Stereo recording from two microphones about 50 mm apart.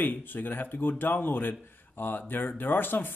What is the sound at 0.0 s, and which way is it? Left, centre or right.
A man's voice, left.